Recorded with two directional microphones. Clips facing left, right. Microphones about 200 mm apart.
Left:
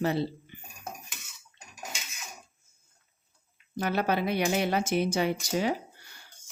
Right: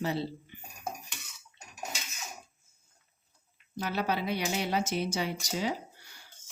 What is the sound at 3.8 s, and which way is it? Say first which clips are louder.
Speech: left 4 dB; 55° left (ahead or behind).